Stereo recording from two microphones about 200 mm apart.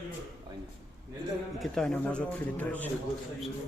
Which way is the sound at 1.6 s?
5° left (ahead or behind).